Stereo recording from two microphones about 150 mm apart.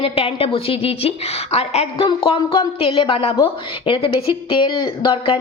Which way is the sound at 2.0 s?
30° left (ahead or behind).